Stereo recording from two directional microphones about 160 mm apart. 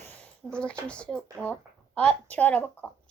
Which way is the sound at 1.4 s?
5° left (ahead or behind).